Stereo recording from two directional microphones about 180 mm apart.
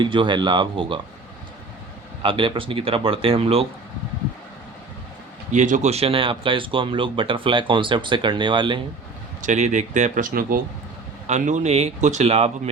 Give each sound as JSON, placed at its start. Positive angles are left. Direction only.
{"t": 0.0, "sound": "speech", "side_deg": -25}
{"t": 2.2, "sound": "speech", "side_deg": -25}
{"t": 5.5, "sound": "speech", "side_deg": -45}
{"t": 9.4, "sound": "speech", "side_deg": -40}